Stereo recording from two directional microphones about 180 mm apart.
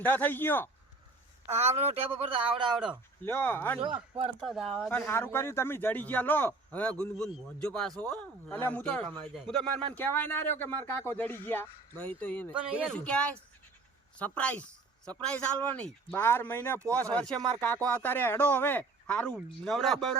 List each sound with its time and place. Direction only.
0.0 s speech: 10° left (ahead or behind)
1.5 s speech: 35° right (ahead or behind)
2.7 s speech: 5° right (ahead or behind)
3.2 s speech: 10° left (ahead or behind)
4.4 s speech: centre (ahead or behind)
4.9 s speech: 15° left (ahead or behind)
15.6 s speech: 5° left (ahead or behind)